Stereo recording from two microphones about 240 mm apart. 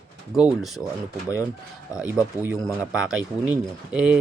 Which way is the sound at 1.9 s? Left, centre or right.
Centre.